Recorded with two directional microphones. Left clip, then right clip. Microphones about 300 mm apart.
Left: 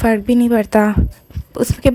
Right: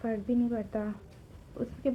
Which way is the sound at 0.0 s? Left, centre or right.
Left.